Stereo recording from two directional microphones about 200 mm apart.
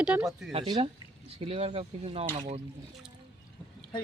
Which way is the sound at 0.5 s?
30° right (ahead or behind).